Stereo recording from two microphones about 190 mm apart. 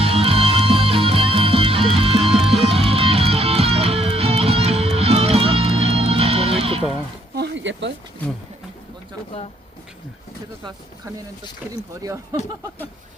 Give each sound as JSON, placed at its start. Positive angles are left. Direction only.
{"t": 0.0, "sound": "music", "side_deg": -30}
{"t": 7.3, "sound": "a sound", "side_deg": -65}
{"t": 12.0, "sound": "speech", "side_deg": -15}